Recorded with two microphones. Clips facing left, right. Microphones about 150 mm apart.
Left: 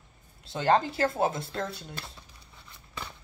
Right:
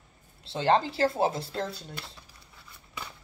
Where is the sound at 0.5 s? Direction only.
25° right (ahead or behind).